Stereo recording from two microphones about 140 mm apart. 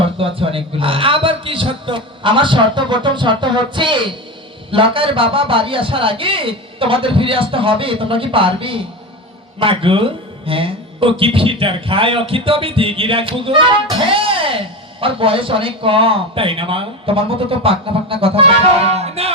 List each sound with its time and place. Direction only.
0.0 s speech: 40° right (ahead or behind)
18.9 s music: 50° right (ahead or behind)